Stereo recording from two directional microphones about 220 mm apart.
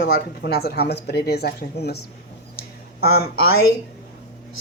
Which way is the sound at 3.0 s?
45° left (ahead or behind).